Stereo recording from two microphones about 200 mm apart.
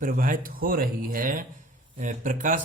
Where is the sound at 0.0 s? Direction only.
45° right (ahead or behind).